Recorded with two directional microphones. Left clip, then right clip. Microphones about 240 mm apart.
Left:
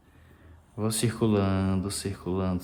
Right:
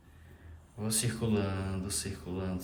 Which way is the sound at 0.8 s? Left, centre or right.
Left.